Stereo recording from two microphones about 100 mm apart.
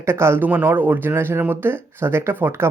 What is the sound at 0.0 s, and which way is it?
Speech, 25° right (ahead or behind).